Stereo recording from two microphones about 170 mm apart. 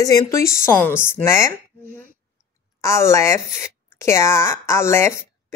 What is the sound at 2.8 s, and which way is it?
Speech, 15° left (ahead or behind).